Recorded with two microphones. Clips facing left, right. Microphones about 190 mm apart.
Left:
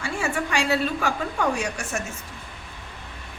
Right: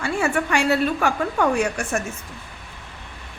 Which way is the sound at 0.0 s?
60° right (ahead or behind).